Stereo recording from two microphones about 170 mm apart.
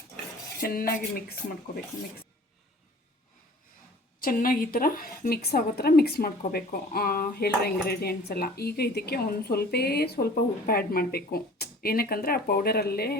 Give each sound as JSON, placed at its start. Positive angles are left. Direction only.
{"t": 0.6, "sound": "cutlery", "side_deg": 60}
{"t": 4.2, "sound": "cutlery", "side_deg": 55}